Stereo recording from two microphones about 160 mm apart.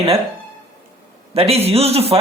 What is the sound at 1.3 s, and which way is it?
Speech, 40° right (ahead or behind).